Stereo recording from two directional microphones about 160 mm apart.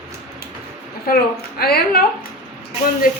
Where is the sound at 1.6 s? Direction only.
75° left (ahead or behind).